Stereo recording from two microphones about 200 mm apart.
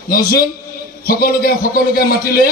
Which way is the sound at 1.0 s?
50° left (ahead or behind).